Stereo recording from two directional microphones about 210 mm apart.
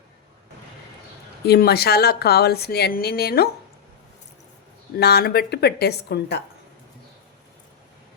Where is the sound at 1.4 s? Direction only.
50° left (ahead or behind).